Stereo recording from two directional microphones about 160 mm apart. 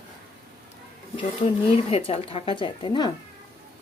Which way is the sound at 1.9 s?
35° left (ahead or behind).